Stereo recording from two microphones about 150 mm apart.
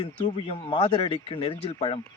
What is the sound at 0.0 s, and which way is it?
Speech, 35° left (ahead or behind).